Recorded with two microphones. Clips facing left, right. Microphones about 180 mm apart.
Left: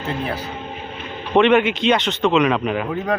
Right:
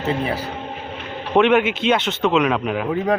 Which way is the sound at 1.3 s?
5° right (ahead or behind).